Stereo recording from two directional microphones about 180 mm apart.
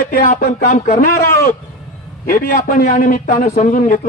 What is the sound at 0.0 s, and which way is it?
Speech, 50° left (ahead or behind).